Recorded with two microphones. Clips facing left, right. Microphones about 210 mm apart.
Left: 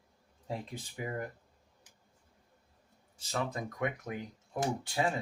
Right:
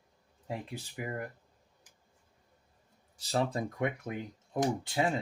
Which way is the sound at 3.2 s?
35° right (ahead or behind).